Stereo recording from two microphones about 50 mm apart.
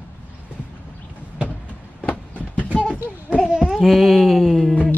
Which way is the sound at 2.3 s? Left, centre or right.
Left.